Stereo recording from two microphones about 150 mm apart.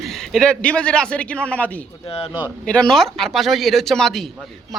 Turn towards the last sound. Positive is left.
turn(degrees=0)  # may be behind; listen again after turning